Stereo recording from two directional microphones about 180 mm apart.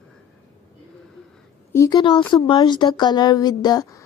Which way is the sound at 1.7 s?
20° left (ahead or behind).